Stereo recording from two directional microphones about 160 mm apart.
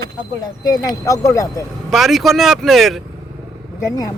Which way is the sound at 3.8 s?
20° left (ahead or behind).